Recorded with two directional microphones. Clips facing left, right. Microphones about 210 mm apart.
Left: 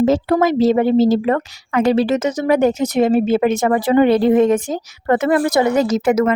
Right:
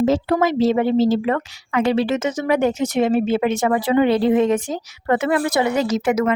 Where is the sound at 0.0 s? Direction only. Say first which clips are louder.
Left 3 dB; 45° left (ahead or behind).